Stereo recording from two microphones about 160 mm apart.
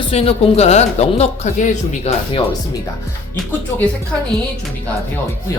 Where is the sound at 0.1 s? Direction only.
35° left (ahead or behind).